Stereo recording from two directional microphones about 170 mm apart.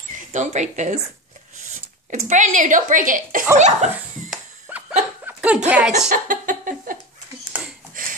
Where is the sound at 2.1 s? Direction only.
45° right (ahead or behind).